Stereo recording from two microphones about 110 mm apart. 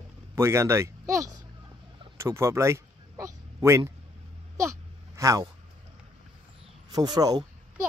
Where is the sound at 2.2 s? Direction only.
25° right (ahead or behind).